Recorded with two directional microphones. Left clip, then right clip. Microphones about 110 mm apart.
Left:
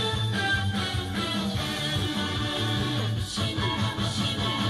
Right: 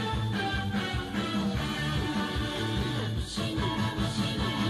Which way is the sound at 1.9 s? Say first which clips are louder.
Left 3 dB; 10° left (ahead or behind).